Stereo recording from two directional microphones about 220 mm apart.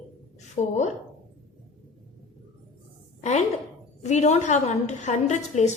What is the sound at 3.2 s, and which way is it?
A woman's voice, 30° left (ahead or behind).